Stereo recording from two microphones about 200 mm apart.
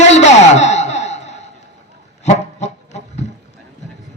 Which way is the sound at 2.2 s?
35° left (ahead or behind).